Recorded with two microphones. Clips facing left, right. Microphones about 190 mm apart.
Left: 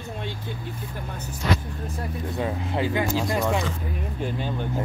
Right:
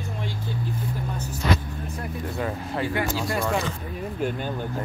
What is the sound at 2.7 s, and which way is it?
Speech, 20° left (ahead or behind).